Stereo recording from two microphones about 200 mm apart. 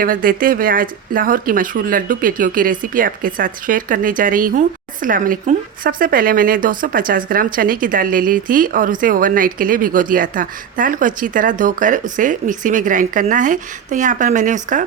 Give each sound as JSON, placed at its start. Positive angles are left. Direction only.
{"t": 0.0, "sound": "speech", "side_deg": -45}